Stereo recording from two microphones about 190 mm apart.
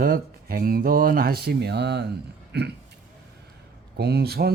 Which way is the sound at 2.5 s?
60° right (ahead or behind).